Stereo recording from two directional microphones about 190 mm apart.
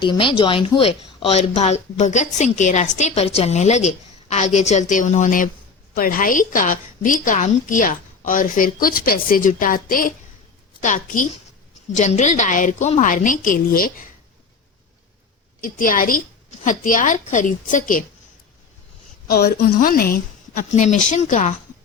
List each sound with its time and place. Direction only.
0.0 s a woman's voice: 25° left (ahead or behind); by 14.1 s 50° left (ahead or behind)
15.6 s a woman's voice: 45° left (ahead or behind)
19.3 s a woman's voice: 55° left (ahead or behind); by 21.5 s 40° left (ahead or behind)